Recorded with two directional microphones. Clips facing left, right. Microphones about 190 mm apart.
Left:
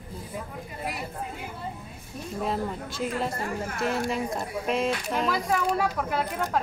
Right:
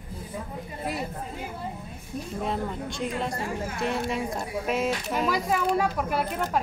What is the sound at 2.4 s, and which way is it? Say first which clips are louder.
Speech: left 1 dB; centre (ahead or behind).